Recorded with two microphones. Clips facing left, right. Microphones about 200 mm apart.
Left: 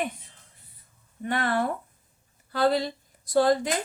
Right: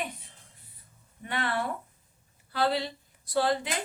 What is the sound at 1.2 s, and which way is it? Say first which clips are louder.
A woman's voice: left 5 dB; 45° left (ahead or behind).